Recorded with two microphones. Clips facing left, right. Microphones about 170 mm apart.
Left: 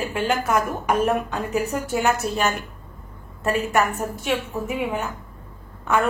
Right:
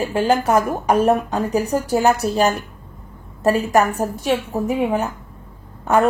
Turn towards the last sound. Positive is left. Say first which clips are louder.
# right 5 dB
turn(degrees=-35)  # may be behind; listen again after turning